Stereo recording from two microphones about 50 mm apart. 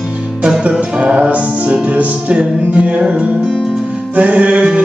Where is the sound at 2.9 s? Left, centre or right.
Centre.